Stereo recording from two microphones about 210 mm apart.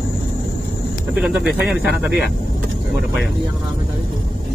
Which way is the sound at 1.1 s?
Centre (ahead or behind).